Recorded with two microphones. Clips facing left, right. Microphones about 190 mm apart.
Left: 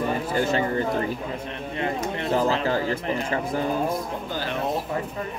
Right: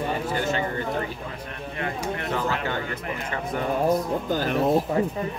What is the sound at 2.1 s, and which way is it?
Speech, 30° left (ahead or behind).